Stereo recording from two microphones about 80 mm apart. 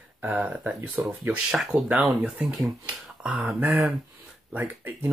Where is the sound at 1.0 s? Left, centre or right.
Right.